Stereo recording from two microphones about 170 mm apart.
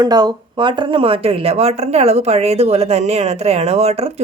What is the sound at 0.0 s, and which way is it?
Speech, 25° right (ahead or behind).